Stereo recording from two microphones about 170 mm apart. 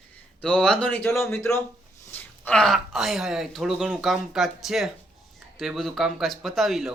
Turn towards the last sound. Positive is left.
turn(degrees=0)  # may be behind; listen again after turning